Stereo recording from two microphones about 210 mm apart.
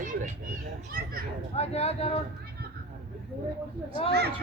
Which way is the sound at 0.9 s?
45° right (ahead or behind).